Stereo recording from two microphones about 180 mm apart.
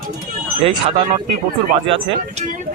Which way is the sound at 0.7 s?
30° right (ahead or behind).